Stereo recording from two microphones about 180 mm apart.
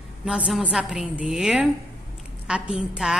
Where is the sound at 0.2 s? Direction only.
5° right (ahead or behind).